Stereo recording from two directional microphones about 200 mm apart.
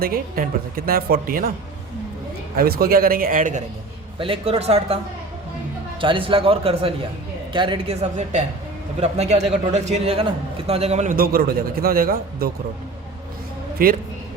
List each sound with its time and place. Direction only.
0.0 s a man's voice: 50° right (ahead or behind)
2.6 s a man's voice: 50° right (ahead or behind)
4.2 s speech: 30° right (ahead or behind)
6.0 s speech: 25° right (ahead or behind)
8.1 s a man's voice: 35° right (ahead or behind)
13.8 s a man's voice: 45° right (ahead or behind)